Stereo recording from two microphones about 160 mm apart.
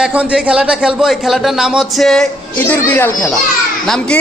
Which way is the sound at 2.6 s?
15° left (ahead or behind).